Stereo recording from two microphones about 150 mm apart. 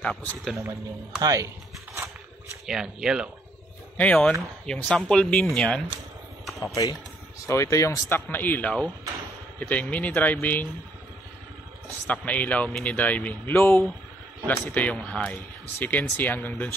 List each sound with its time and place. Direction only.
0.0 s speech: 10° left (ahead or behind)
1.2 s speech: 25° right (ahead or behind)
2.6 s speech: 5° right (ahead or behind)
3.9 s speech: 10° left (ahead or behind)
6.6 s speech: 25° left (ahead or behind)
12.1 s speech: 10° left (ahead or behind)